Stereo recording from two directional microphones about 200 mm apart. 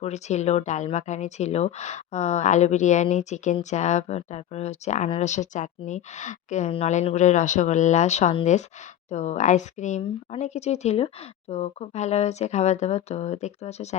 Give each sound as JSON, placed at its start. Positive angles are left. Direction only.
{"t": 0.0, "sound": "speech", "side_deg": 35}